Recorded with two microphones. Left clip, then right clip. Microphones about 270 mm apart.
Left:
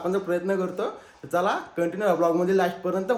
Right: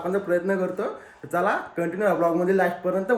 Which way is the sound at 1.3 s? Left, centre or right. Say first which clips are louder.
Right 1 dB; centre.